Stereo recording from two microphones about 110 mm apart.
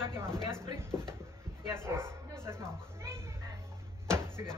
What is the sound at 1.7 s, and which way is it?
Speech, 25° right (ahead or behind).